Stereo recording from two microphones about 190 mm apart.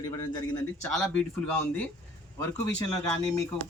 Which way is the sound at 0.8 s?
5° left (ahead or behind).